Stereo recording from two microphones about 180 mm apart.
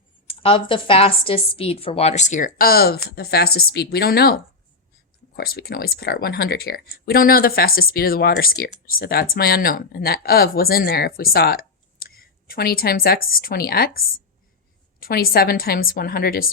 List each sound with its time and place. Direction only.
0.3 s a woman's voice: 30° left (ahead or behind)
2.6 s speech: 55° left (ahead or behind)
5.4 s speech: 60° left (ahead or behind)
15.0 s speech: 55° left (ahead or behind)